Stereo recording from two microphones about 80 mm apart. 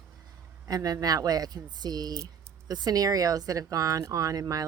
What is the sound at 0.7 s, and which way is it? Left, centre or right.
Speech, right.